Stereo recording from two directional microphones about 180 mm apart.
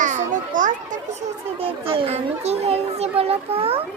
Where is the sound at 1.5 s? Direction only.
30° right (ahead or behind).